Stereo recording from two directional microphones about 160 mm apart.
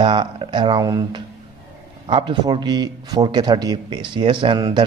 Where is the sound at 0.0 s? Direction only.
30° right (ahead or behind).